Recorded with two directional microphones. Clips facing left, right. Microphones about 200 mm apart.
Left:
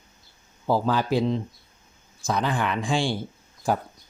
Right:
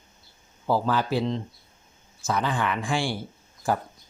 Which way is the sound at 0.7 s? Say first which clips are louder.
Left 1 dB; 15° left (ahead or behind).